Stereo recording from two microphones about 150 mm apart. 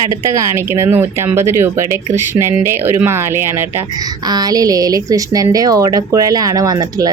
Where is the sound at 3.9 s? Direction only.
25° right (ahead or behind).